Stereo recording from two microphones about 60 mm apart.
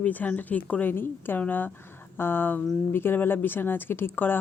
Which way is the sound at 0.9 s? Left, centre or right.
Left.